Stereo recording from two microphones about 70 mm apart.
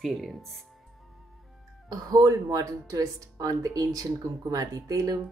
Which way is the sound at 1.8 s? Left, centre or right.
Right.